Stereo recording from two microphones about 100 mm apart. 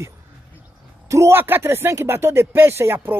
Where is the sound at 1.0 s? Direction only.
30° right (ahead or behind).